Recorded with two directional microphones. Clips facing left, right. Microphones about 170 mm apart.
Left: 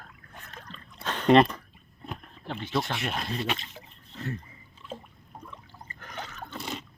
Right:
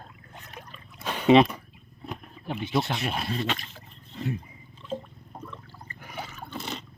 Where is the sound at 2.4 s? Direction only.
15° right (ahead or behind).